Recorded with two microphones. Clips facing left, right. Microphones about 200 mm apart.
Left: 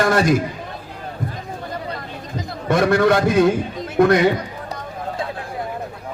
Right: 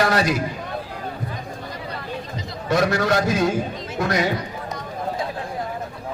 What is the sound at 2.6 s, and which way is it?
A man's voice, 55° left (ahead or behind).